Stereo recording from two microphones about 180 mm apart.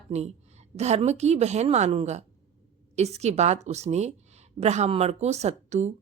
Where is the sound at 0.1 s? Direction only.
35° right (ahead or behind).